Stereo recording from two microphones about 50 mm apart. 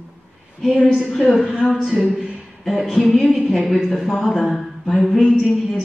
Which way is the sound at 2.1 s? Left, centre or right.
Centre.